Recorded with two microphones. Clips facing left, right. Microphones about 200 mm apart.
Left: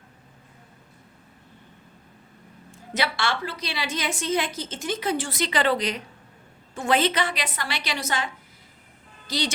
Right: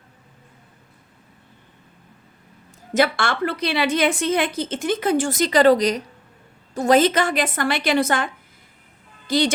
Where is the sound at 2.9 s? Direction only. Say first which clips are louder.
Right 7 dB; 50° right (ahead or behind).